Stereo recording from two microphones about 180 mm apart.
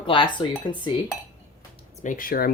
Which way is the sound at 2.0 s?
50° left (ahead or behind).